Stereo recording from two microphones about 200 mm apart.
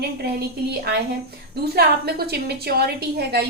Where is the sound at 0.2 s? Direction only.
55° right (ahead or behind).